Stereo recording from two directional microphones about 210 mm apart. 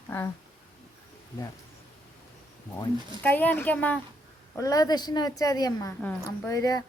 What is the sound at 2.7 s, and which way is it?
Speech, 10° left (ahead or behind).